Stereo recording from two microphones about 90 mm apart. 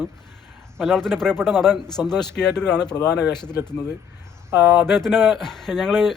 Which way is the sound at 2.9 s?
45° left (ahead or behind).